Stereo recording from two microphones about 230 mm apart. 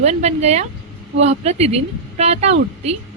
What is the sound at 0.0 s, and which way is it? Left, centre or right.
A woman's voice, right.